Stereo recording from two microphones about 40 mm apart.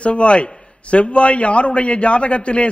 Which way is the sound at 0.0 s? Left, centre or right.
Left.